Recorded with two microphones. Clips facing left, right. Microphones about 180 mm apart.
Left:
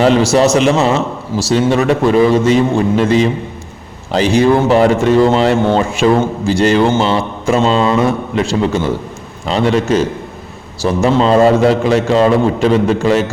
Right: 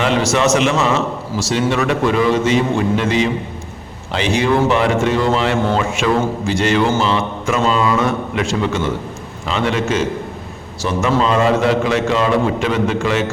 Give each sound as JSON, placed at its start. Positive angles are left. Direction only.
{"t": 0.0, "sound": "a man's voice", "side_deg": 35}